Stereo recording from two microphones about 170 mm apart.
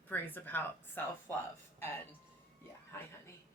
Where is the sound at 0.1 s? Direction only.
10° left (ahead or behind).